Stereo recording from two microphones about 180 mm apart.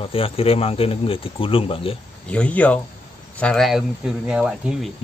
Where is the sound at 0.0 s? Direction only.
30° left (ahead or behind).